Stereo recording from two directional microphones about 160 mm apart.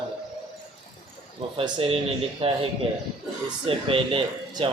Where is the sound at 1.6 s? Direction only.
35° right (ahead or behind).